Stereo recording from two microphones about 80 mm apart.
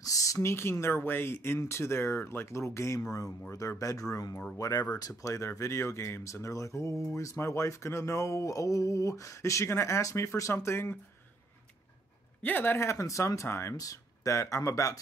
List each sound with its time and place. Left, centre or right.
0.0 s speech: left
12.4 s speech: left
13.7 s speech: left